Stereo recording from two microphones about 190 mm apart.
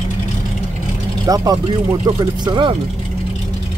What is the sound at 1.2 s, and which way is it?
Speech, 20° right (ahead or behind).